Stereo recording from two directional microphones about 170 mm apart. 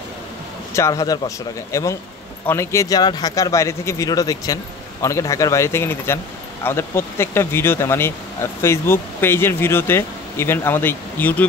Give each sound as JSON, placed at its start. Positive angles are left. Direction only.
{"t": 0.7, "sound": "speech", "side_deg": 15}